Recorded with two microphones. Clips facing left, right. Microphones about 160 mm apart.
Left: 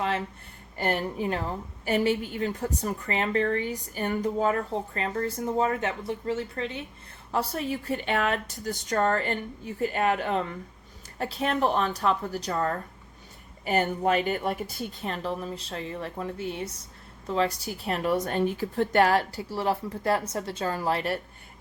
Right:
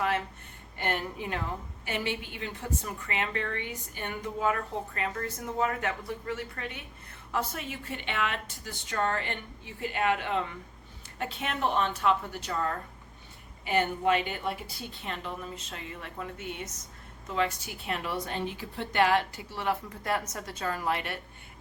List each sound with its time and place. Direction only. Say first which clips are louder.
0.8 s a woman's voice: left 5 dB; 35° left (ahead or behind)